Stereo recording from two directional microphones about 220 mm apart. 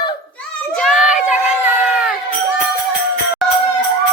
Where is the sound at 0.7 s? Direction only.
Centre (ahead or behind).